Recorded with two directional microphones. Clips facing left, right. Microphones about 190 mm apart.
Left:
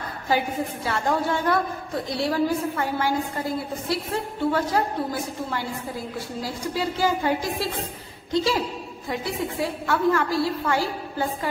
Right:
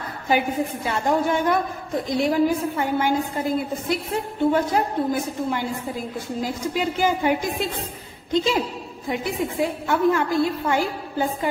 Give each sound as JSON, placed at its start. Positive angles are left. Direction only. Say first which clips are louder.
{"t": 0.8, "sound": "a woman's voice", "louder": "right 2 dB", "side_deg": -20}